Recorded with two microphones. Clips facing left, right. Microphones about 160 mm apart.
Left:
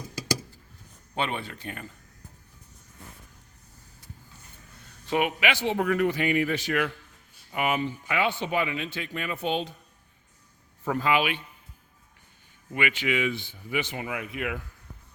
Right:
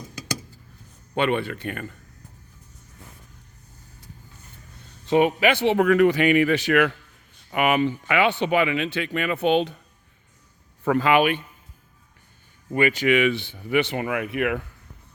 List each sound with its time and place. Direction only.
1.1 s speech: 65° right (ahead or behind)
5.0 s speech: 30° right (ahead or behind)
5.6 s speech: 90° right; by 9.7 s 65° right (ahead or behind)
10.8 s speech: 85° right
11.2 s speech: 50° right (ahead or behind)
12.7 s speech: 40° right (ahead or behind)
13.1 s speech: 75° right (ahead or behind)